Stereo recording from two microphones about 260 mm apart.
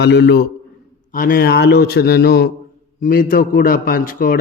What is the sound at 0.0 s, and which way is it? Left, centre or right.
A man's voice, left.